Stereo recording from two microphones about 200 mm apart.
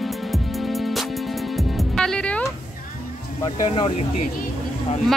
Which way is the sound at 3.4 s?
25° left (ahead or behind).